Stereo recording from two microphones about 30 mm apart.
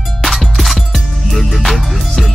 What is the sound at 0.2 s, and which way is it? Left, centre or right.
Music, centre.